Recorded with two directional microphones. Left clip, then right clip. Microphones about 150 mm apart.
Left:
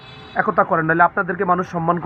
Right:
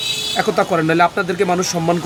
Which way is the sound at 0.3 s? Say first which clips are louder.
Left 1 dB; 35° right (ahead or behind).